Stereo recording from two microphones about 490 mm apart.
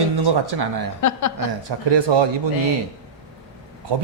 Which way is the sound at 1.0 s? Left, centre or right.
Left.